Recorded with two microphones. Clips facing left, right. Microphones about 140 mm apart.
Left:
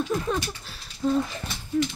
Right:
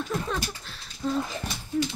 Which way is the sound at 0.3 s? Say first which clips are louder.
Left 3 dB; 10° left (ahead or behind).